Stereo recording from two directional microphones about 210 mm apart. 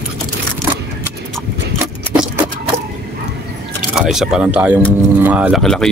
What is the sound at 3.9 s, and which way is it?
Speech, centre (ahead or behind).